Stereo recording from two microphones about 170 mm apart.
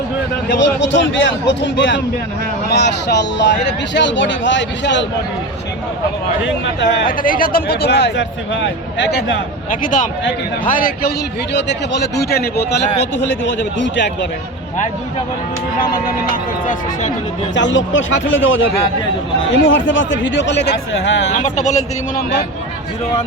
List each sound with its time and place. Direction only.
0.5 s speech: 90° left
6.7 s speech: 90° left
7.2 s speech: 55° left (ahead or behind); by 9.4 s 90° left
9.8 s a man's voice: 50° left (ahead or behind)
11.5 s speech: 90° left; by 12.8 s 70° left (ahead or behind)
13.1 s speech: 90° left
15.8 s speech: 55° left (ahead or behind)
17.5 s speech: 90° left
21.3 s a man's voice: 45° left (ahead or behind)